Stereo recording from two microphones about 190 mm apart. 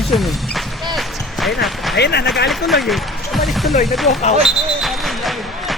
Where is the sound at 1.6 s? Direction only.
Centre (ahead or behind).